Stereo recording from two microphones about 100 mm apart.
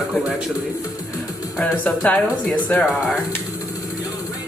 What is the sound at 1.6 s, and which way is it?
Speech, 10° left (ahead or behind).